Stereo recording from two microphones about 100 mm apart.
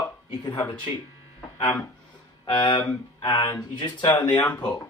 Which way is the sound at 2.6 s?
50° left (ahead or behind).